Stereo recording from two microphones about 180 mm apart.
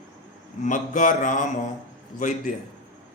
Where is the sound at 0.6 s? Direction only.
45° left (ahead or behind).